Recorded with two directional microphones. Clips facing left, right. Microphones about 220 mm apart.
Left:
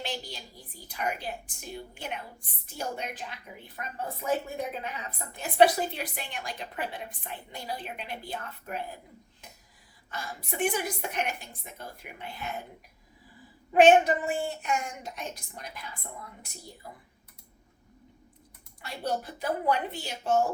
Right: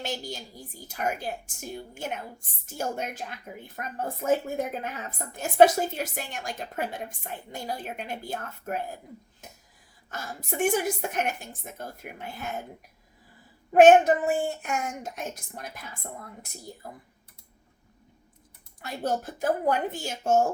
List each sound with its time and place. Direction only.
0.0 s a woman's voice: 45° right (ahead or behind)
10.1 s a woman's voice: 45° right (ahead or behind)
14.0 s a woman's voice: 50° right (ahead or behind)
18.8 s a woman's voice: 45° right (ahead or behind)